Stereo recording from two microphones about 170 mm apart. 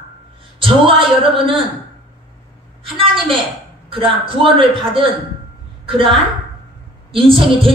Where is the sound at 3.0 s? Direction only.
30° right (ahead or behind).